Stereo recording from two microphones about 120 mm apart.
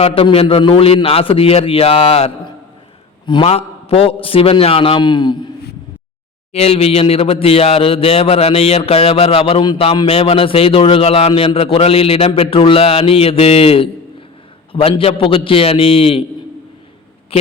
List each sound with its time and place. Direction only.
0.0 s a man's voice: 50° left (ahead or behind)
3.4 s a man's voice: 55° left (ahead or behind); by 5.5 s 40° left (ahead or behind)
6.5 s a man's voice: 60° left (ahead or behind)
17.3 s a man's voice: 55° left (ahead or behind)